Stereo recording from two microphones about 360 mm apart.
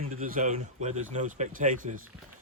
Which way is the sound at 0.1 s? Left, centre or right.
Right.